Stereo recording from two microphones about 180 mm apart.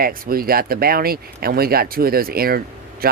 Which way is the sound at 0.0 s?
55° right (ahead or behind).